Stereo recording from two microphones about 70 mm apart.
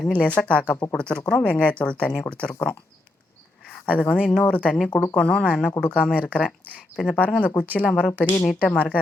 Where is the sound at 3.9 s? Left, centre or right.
Centre.